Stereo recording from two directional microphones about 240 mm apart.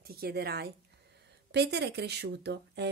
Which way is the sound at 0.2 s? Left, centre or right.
Right.